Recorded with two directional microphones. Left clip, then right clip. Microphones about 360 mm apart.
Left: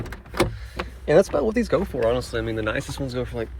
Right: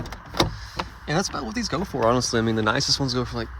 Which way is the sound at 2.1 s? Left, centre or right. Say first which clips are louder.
Right 2 dB; centre.